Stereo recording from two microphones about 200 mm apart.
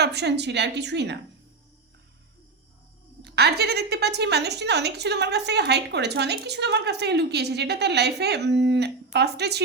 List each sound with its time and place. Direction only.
0.0 s a woman's voice: 55° right (ahead or behind)
3.2 s a woman's voice: 55° right (ahead or behind)